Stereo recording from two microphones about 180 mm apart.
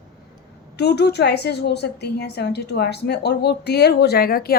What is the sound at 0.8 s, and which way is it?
A woman's voice, 65° left (ahead or behind).